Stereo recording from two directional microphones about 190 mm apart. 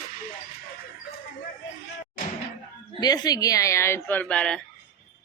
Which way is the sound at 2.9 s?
20° left (ahead or behind).